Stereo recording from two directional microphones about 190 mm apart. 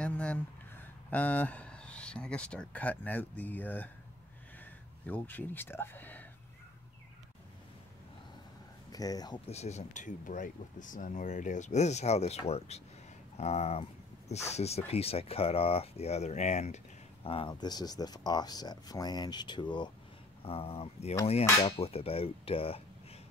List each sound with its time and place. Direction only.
0.0 s speech: 5° left (ahead or behind)
5.0 s speech: 10° left (ahead or behind)
8.9 s speech: 20° left (ahead or behind)
9.5 s speech: 35° left (ahead or behind)